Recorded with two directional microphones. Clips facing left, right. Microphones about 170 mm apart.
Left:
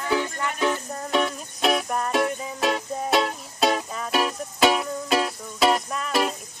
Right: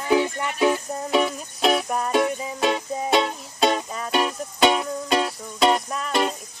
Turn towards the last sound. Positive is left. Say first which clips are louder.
# right 1 dB
turn(degrees=0)  # may be behind; listen again after turning